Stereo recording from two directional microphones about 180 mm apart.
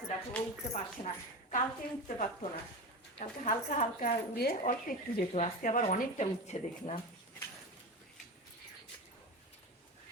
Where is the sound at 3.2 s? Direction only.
45° left (ahead or behind).